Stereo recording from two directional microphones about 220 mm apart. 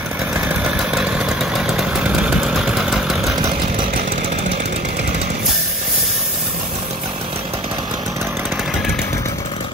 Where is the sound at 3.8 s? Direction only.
45° right (ahead or behind).